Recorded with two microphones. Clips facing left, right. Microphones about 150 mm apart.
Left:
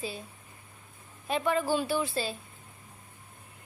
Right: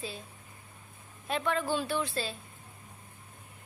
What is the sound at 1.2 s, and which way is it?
A woman's voice, 5° left (ahead or behind).